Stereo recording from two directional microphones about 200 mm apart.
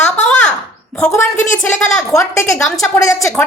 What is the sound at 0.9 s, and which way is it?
A woman's voice, 5° left (ahead or behind).